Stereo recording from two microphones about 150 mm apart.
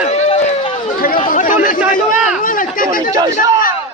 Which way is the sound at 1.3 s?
65° left (ahead or behind).